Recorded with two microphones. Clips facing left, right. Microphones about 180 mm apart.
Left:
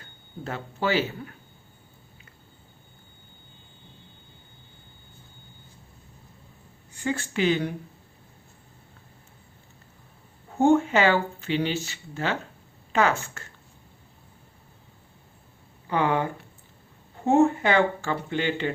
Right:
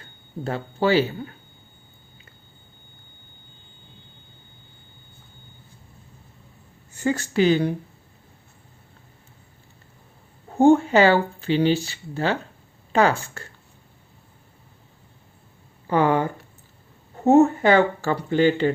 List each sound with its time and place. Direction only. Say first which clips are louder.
0.4 s speech: right 6 dB; 30° right (ahead or behind)
6.9 s speech: right 6 dB; 40° right (ahead or behind)
10.6 s speech: right 4 dB; 35° right (ahead or behind)
15.9 s speech: right 5 dB; 40° right (ahead or behind)
17.2 s speech: right 5 dB; 40° right (ahead or behind)